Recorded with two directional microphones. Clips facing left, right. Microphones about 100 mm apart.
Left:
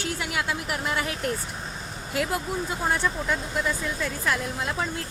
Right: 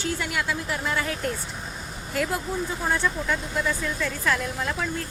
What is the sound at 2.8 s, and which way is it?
Speech, 15° left (ahead or behind).